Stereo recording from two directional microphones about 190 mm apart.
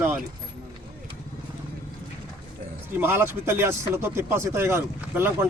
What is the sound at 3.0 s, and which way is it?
Speech, 10° right (ahead or behind).